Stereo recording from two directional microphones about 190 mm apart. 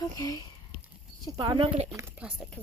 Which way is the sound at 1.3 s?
25° right (ahead or behind).